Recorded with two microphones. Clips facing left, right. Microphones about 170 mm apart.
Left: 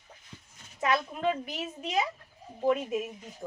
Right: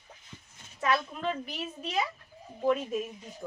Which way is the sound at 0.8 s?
20° left (ahead or behind).